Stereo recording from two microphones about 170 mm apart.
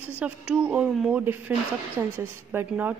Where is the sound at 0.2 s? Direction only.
5° right (ahead or behind).